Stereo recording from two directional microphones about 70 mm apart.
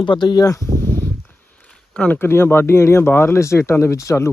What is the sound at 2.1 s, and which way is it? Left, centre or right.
Speech, left.